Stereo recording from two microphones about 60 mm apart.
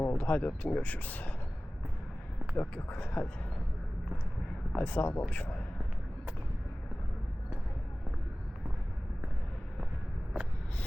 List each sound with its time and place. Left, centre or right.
0.0 s a sound: left
0.3 s speech: left
2.6 s speech: left
4.8 s speech: left